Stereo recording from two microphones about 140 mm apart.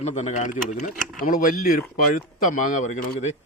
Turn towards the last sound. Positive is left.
turn(degrees=60)  # may be behind; listen again after turning